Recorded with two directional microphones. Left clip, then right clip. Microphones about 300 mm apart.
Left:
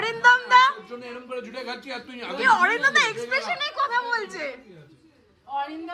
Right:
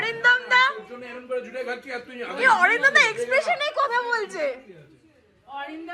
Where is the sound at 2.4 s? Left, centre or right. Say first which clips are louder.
Right 1 dB; centre.